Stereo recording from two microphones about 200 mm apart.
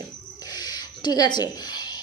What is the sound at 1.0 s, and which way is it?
Speech, 20° left (ahead or behind).